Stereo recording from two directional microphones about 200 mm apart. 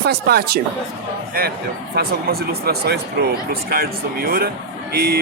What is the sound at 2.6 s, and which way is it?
A man's voice, 55° right (ahead or behind).